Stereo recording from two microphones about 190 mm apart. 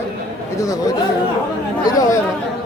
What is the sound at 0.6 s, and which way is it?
Speech, 20° left (ahead or behind).